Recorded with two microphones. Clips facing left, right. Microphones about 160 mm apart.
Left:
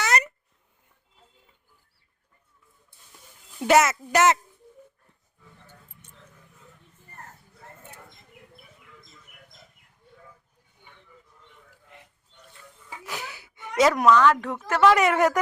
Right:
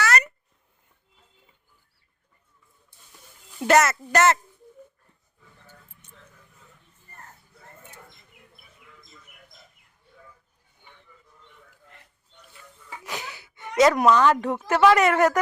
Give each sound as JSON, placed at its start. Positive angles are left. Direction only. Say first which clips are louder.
{"t": 0.0, "sound": "a sound", "louder": "right 1 dB", "side_deg": 20}
{"t": 3.6, "sound": "speech", "louder": "even", "side_deg": 5}
{"t": 13.1, "sound": "gasp", "louder": "right 1 dB", "side_deg": 5}
{"t": 14.1, "sound": "speech", "louder": "even", "side_deg": -25}
{"t": 14.7, "sound": "speech", "louder": "right 1 dB", "side_deg": -10}
{"t": 14.9, "sound": "speech", "louder": "right 1 dB", "side_deg": 10}